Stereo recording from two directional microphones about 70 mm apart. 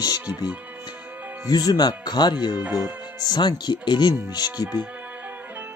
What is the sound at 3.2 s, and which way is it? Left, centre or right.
Speech, left.